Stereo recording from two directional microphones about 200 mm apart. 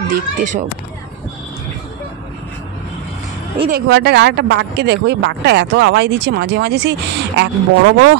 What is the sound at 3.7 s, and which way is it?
Speech, 55° right (ahead or behind).